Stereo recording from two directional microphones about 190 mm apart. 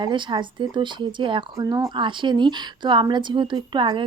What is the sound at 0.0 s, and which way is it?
Speech, 25° right (ahead or behind).